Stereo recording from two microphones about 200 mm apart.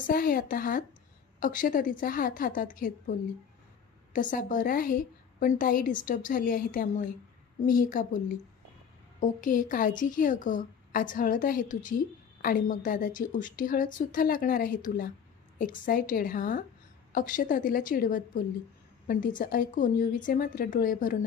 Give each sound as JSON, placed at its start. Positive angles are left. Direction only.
{"t": 0.0, "sound": "a woman's voice", "side_deg": 45}